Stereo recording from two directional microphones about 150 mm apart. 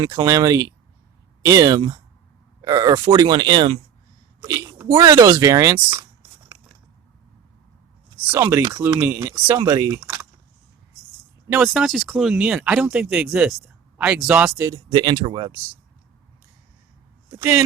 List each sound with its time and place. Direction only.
0.0 s speech: 30° right (ahead or behind)
4.4 s a sound: 20° right (ahead or behind)
4.9 s speech: 25° right (ahead or behind)
8.3 s speech: 20° right (ahead or behind)
11.4 s speech: 10° right (ahead or behind)
11.7 s speech: centre (ahead or behind)
14.8 s speech: 30° right (ahead or behind)